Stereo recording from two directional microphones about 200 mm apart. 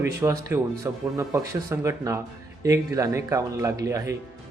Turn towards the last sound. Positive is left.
turn(degrees=-15)  # may be behind; listen again after turning